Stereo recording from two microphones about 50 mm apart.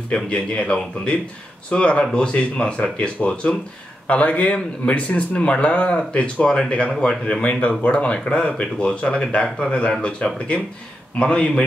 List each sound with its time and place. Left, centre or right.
0.3 s a man's voice: left